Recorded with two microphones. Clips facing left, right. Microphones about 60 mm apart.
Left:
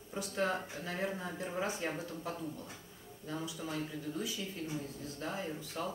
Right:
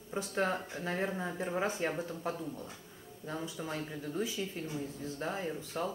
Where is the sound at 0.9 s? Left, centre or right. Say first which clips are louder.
Right 2 dB; right.